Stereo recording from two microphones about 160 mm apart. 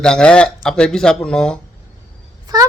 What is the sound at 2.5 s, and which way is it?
Speech, 25° right (ahead or behind).